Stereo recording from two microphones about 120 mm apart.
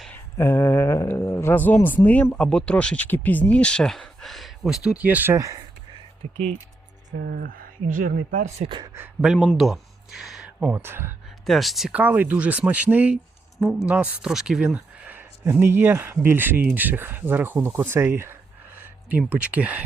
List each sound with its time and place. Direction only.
0.1 s speech: 20° left (ahead or behind); by 5.5 s 25° right (ahead or behind)
6.2 s speech: 65° right (ahead or behind)
8.3 s speech: 90° right
8.6 s speech: 40° right (ahead or behind)
9.2 s speech: centre (ahead or behind); by 11.1 s 20° right (ahead or behind)
11.4 s speech: centre (ahead or behind); by 18.3 s 20° right (ahead or behind)
18.8 s a sound: 15° right (ahead or behind)
19.3 s speech: 10° right (ahead or behind)